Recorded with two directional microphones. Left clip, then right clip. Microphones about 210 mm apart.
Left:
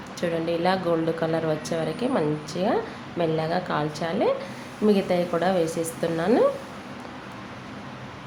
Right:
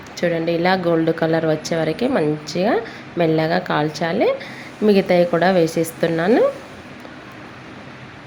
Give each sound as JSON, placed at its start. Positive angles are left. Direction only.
{"t": 0.2, "sound": "speech", "side_deg": -20}